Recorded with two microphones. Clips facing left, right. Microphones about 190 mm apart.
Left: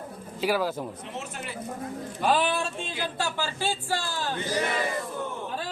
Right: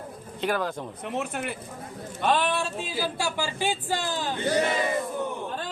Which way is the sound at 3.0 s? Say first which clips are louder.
Right 2 dB; 10° right (ahead or behind).